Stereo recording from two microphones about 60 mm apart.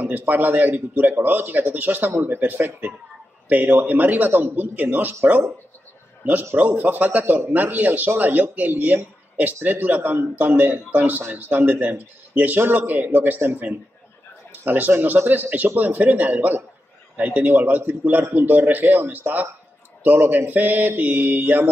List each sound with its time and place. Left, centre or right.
0.0 s speech: right
6.5 s a man's voice: right